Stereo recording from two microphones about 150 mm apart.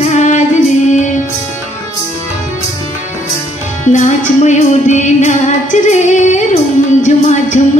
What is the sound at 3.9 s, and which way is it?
Music, 50° left (ahead or behind).